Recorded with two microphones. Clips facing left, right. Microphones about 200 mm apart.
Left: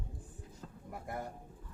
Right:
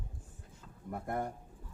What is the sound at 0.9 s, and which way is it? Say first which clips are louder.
Speech: right 6 dB; 55° right (ahead or behind).